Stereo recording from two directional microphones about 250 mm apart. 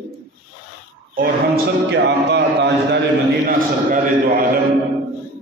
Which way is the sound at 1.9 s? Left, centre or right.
Right.